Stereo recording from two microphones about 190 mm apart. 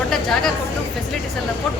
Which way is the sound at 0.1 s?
Centre (ahead or behind).